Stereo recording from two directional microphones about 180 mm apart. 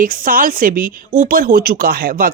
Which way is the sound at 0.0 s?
50° right (ahead or behind).